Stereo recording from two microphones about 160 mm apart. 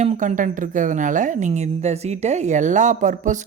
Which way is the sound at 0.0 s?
50° right (ahead or behind).